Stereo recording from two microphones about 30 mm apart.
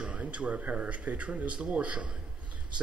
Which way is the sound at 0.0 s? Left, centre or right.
Right.